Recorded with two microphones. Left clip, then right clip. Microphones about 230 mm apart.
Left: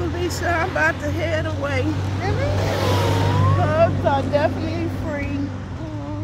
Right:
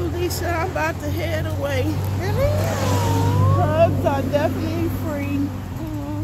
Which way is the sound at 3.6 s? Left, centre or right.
Centre.